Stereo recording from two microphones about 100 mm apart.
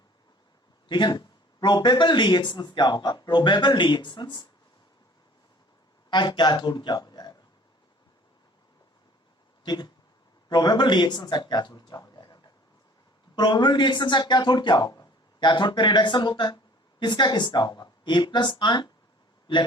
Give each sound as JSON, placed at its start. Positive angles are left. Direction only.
{"t": 0.9, "sound": "speech", "side_deg": 50}
{"t": 6.1, "sound": "speech", "side_deg": 50}
{"t": 9.6, "sound": "speech", "side_deg": 45}